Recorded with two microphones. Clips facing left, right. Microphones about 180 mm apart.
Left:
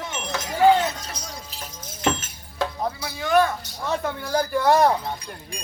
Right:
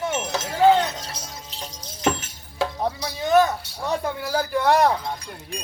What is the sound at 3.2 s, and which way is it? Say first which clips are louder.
Speech: right 2 dB; 20° right (ahead or behind).